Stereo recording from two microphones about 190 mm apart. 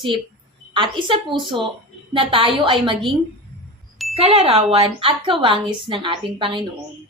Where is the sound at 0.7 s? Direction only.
25° right (ahead or behind).